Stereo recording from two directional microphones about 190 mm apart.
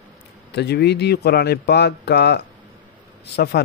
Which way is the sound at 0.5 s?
60° left (ahead or behind).